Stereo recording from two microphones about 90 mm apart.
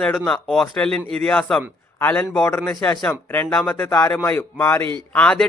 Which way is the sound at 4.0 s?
35° left (ahead or behind).